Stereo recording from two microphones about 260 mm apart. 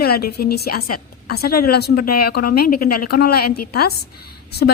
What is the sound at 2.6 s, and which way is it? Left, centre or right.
Speech, left.